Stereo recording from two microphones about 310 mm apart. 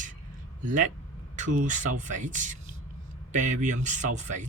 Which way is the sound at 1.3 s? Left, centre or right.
Right.